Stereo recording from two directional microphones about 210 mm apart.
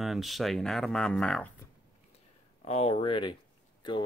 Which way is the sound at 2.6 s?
30° left (ahead or behind).